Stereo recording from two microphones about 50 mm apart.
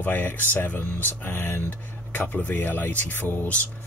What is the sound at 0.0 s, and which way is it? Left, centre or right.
Speech, left.